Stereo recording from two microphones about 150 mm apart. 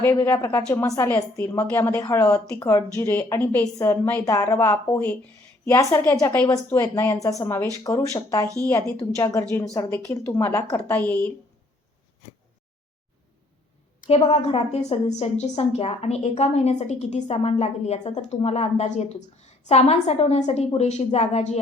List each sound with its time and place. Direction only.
0.0 s a woman's voice: 15° left (ahead or behind)
14.3 s a woman's voice: 40° left (ahead or behind)